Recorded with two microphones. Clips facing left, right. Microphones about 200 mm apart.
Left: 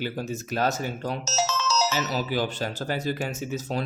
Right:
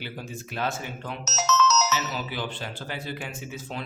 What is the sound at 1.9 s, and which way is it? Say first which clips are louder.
Speech: left 4 dB; 40° left (ahead or behind).